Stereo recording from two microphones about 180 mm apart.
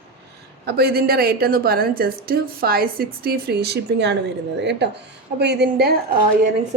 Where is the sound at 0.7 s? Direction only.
60° right (ahead or behind).